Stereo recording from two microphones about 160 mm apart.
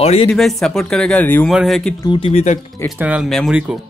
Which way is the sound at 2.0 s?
35° left (ahead or behind).